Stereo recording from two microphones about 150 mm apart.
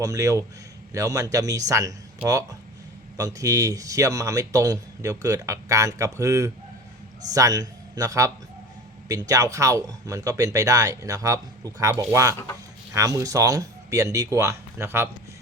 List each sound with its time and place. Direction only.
0.0 s a man's voice: 20° right (ahead or behind)